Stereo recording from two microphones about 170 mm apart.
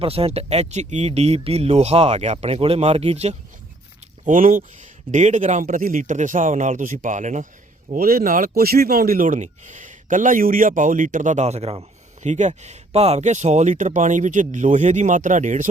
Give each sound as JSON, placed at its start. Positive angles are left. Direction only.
{"t": 0.0, "sound": "speech", "side_deg": -35}
{"t": 4.3, "sound": "speech", "side_deg": -50}
{"t": 7.9, "sound": "speech", "side_deg": -60}